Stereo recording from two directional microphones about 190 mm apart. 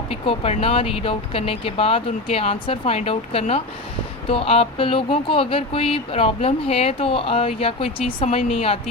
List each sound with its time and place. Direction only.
0.1 s speech: 30° left (ahead or behind)